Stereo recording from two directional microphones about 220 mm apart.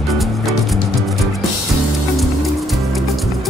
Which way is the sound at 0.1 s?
Centre (ahead or behind).